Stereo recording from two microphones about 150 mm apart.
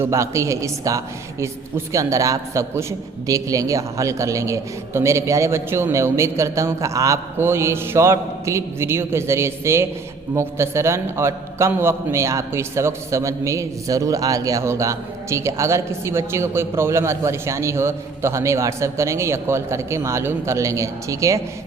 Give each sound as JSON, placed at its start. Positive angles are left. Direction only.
{"t": 0.0, "sound": "a man's voice", "side_deg": -20}